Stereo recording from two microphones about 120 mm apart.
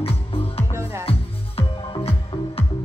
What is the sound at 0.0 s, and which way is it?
Music, 50° left (ahead or behind).